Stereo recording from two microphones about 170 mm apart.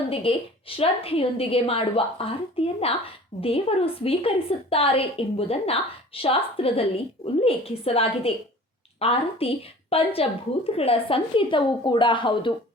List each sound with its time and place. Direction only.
0.1 s a woman's voice: 35° left (ahead or behind)